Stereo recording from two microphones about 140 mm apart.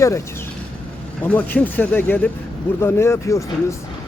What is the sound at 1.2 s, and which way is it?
Speech, 10° left (ahead or behind).